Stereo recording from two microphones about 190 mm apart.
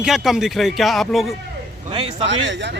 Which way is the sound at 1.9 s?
30° right (ahead or behind).